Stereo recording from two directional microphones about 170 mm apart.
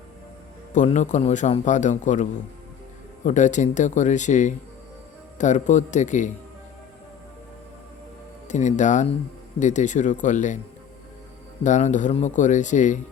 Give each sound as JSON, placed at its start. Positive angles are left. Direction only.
{"t": 0.7, "sound": "speech", "side_deg": 45}
{"t": 3.2, "sound": "speech", "side_deg": 45}
{"t": 8.4, "sound": "speech", "side_deg": 45}
{"t": 11.6, "sound": "speech", "side_deg": 45}